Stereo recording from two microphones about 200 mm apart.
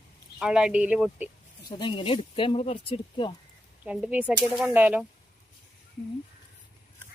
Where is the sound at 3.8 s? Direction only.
5° right (ahead or behind).